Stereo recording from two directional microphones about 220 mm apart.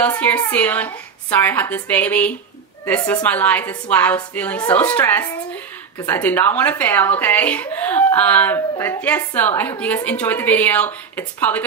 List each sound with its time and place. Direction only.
0.0 s a woman's voice: 5° left (ahead or behind)